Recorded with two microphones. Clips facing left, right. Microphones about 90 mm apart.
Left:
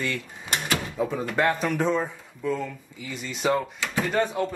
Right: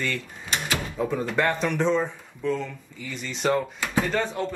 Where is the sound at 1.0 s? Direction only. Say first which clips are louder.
Right 1 dB; 5° left (ahead or behind).